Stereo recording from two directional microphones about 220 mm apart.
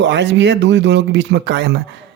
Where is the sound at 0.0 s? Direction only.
55° right (ahead or behind).